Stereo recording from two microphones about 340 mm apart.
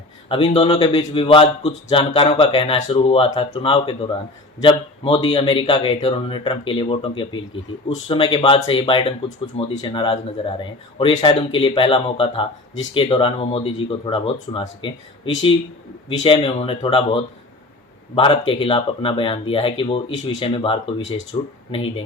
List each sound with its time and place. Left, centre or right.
0.3 s a man's voice: centre